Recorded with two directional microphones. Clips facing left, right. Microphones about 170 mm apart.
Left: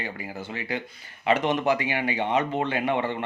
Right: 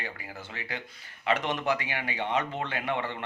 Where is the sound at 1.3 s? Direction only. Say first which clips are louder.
Left 5 dB; 15° left (ahead or behind).